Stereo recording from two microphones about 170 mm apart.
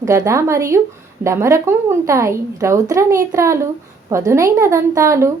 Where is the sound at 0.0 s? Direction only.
20° right (ahead or behind).